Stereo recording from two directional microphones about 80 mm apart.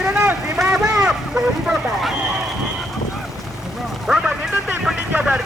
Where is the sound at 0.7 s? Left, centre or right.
Centre.